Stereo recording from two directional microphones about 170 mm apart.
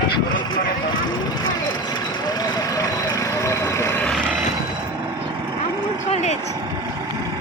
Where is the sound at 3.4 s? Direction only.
15° left (ahead or behind).